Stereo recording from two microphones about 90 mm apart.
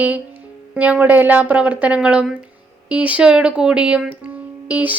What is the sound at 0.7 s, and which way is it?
Speech, 15° right (ahead or behind).